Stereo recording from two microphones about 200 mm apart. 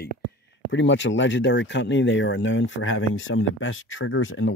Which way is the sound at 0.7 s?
65° left (ahead or behind).